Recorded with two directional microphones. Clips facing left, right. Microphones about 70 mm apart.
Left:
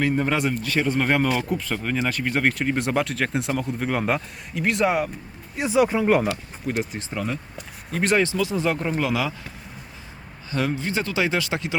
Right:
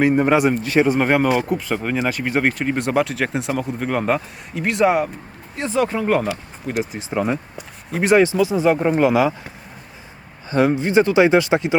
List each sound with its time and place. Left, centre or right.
0.0 s speech: right; by 5.1 s centre
5.5 s speech: centre
7.1 s speech: right
7.9 s speech: centre; by 9.5 s right
10.5 s speech: right